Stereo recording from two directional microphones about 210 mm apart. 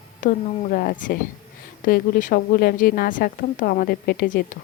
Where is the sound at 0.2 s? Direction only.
40° left (ahead or behind).